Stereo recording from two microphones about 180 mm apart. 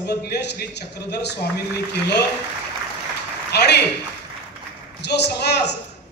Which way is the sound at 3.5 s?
65° left (ahead or behind).